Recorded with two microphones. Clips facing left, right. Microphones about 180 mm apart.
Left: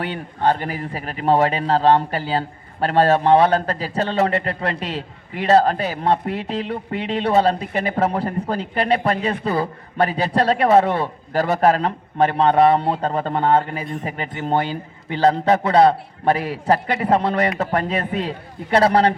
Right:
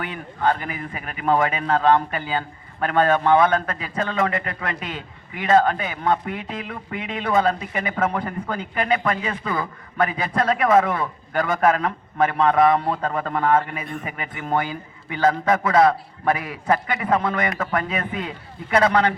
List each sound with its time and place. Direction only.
0.0 s a man's voice: 35° left (ahead or behind)